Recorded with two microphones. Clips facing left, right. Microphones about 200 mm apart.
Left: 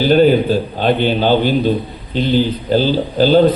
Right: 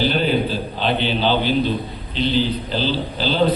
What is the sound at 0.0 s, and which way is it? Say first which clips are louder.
A man's voice: left 8 dB; 45° left (ahead or behind).